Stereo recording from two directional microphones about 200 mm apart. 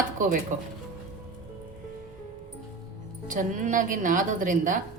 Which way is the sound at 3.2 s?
40° right (ahead or behind).